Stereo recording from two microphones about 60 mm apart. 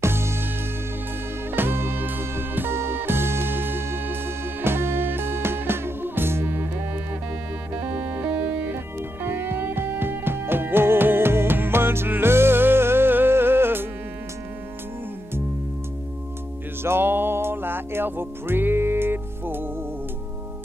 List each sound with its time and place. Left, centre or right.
0.0 s music: right
1.5 s music: right
9.2 s music: right
16.8 s music: right